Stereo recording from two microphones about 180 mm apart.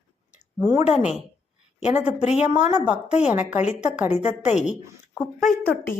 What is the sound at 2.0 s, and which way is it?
Speech, 35° left (ahead or behind).